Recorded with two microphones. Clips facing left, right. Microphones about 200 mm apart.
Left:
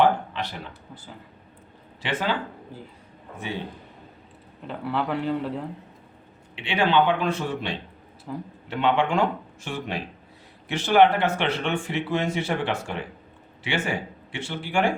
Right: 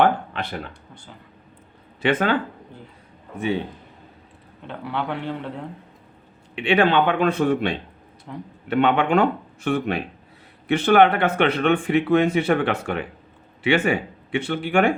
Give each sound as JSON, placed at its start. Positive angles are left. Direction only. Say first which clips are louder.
{"t": 2.0, "sound": "speech", "louder": "right 7 dB", "side_deg": -55}
{"t": 4.6, "sound": "speech", "louder": "left 1 dB", "side_deg": 0}
{"t": 6.6, "sound": "speech", "louder": "right 3 dB", "side_deg": -55}
{"t": 8.3, "sound": "speech", "louder": "left 2 dB", "side_deg": 0}
{"t": 8.6, "sound": "speech", "louder": "right 4 dB", "side_deg": -60}